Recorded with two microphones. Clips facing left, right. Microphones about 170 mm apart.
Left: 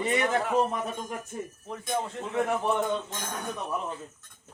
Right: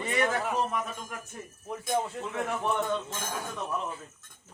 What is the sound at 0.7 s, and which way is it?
Speech, 30° left (ahead or behind).